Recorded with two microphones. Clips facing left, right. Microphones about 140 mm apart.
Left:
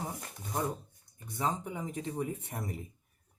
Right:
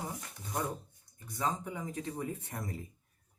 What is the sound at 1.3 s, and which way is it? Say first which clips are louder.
Speech: left 1 dB; 25° left (ahead or behind).